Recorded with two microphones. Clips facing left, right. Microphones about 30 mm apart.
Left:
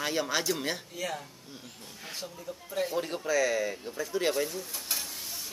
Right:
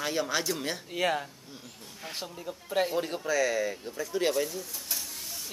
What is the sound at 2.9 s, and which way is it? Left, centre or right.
Speech, centre.